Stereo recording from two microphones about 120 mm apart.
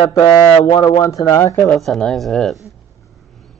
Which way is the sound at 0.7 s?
30° left (ahead or behind).